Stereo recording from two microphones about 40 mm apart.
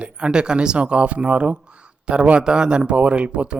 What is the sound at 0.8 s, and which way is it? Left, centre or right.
Speech, right.